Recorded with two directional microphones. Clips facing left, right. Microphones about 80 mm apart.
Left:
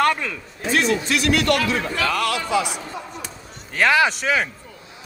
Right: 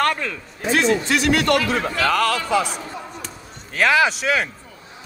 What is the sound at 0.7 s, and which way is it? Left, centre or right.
A man's voice, right.